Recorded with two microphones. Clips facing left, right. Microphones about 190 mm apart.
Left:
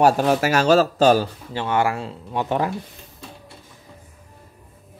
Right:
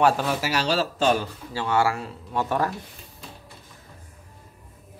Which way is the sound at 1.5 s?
20° left (ahead or behind).